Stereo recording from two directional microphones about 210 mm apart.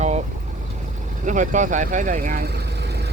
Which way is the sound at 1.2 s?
35° right (ahead or behind).